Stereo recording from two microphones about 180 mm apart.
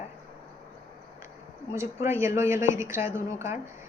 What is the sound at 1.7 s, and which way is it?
Speech, 15° right (ahead or behind).